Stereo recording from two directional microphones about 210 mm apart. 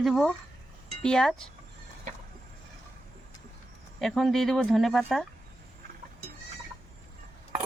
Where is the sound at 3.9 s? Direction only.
Centre (ahead or behind).